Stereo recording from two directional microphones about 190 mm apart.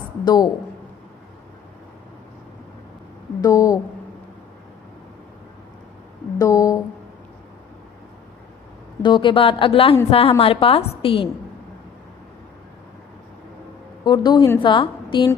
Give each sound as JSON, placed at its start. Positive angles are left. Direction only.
{"t": 0.3, "sound": "a woman's voice", "side_deg": 20}
{"t": 3.4, "sound": "a woman's voice", "side_deg": 15}
{"t": 6.4, "sound": "a sound", "side_deg": 15}
{"t": 9.0, "sound": "a woman's voice", "side_deg": 25}
{"t": 14.0, "sound": "a woman's voice", "side_deg": 25}